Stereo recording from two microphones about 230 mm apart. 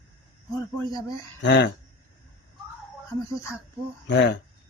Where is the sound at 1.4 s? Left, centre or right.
Left.